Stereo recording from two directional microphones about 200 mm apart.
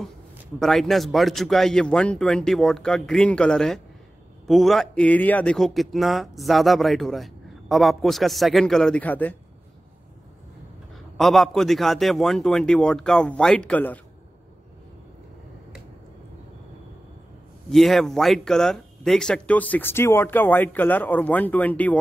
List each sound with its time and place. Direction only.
0.6 s speech: centre (ahead or behind)
11.1 s speech: centre (ahead or behind)
17.6 s speech: centre (ahead or behind)